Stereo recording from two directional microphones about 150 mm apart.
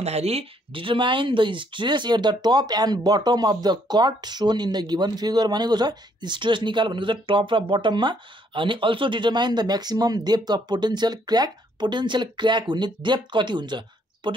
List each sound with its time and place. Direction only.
0.0 s speech: 45° right (ahead or behind)